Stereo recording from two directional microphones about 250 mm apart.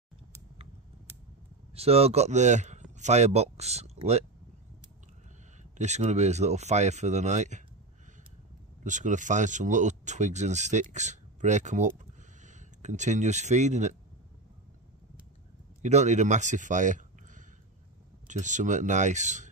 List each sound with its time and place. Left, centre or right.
1.8 s speech: right
5.6 s speech: right
8.8 s speech: right
15.8 s speech: right